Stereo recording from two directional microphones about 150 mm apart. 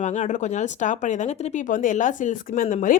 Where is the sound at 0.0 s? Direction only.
55° left (ahead or behind).